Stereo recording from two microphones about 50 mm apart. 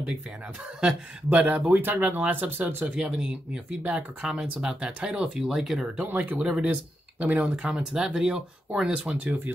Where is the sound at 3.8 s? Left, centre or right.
Right.